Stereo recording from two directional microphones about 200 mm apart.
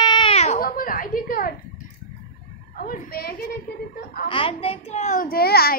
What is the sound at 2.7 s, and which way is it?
Speech, 45° left (ahead or behind).